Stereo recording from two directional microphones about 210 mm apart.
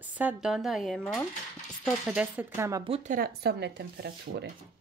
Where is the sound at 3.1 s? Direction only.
45° right (ahead or behind).